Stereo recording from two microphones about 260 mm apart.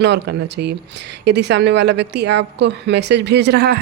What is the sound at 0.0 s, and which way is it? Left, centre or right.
Speech, right.